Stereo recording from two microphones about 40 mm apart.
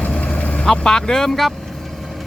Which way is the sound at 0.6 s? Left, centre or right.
Centre.